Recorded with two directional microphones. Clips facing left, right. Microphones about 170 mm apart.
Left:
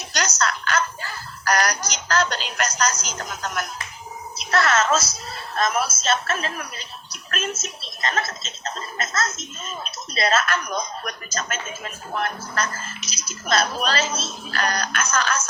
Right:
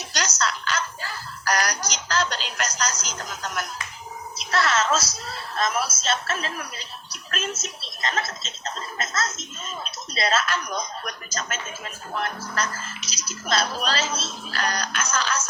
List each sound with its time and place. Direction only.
0.1 s a sound: 50° left (ahead or behind)
1.5 s a woman's voice: 50° left (ahead or behind)
7.1 s television: 50° left (ahead or behind)
7.6 s speech: 55° left (ahead or behind)